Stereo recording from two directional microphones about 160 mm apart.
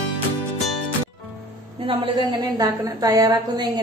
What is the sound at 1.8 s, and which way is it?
A woman's voice, 35° right (ahead or behind).